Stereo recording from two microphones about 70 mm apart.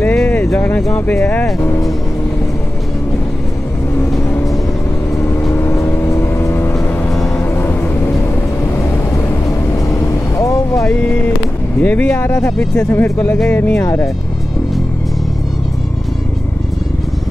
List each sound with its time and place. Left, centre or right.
0.0 s a sound: centre
0.6 s speech: left
1.6 s speech: left
5.6 s vehicle: left
8.7 s vehicle: left
11.8 s speech: left